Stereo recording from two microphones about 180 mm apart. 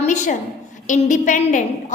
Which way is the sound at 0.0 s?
40° left (ahead or behind).